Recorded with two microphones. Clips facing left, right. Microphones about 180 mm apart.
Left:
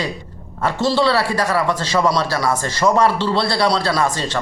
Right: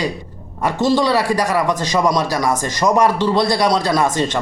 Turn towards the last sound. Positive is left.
turn(degrees=-20)  # may be behind; listen again after turning